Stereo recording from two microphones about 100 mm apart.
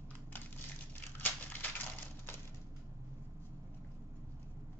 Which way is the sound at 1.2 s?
15° left (ahead or behind).